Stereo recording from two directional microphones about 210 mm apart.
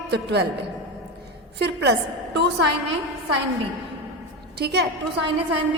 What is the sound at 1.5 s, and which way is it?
Speech, 55° right (ahead or behind).